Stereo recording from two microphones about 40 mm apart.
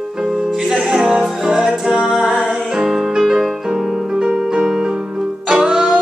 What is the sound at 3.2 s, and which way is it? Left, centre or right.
Music, centre.